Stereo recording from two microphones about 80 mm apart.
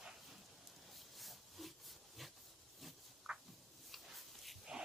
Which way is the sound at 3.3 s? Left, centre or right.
Centre.